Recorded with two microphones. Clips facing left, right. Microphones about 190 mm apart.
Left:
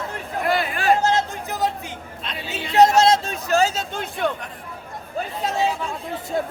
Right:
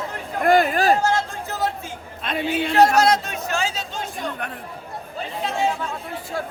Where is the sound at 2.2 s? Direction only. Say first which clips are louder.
Right 9 dB; 55° right (ahead or behind).